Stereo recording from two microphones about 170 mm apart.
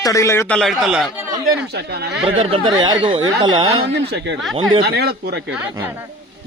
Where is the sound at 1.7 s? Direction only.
75° right (ahead or behind).